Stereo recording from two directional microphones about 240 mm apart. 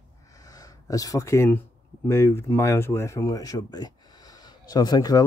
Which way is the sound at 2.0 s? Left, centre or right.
Centre.